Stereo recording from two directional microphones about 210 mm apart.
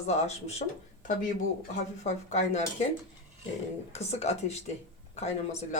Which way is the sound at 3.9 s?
30° left (ahead or behind).